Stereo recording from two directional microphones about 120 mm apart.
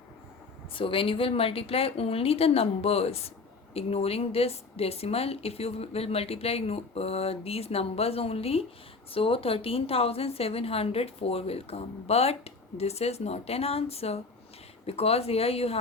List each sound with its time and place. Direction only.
0.7 s a woman's voice: 50° left (ahead or behind)